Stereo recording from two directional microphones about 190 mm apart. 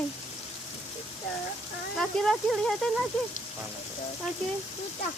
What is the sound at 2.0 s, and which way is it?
Speech, centre (ahead or behind).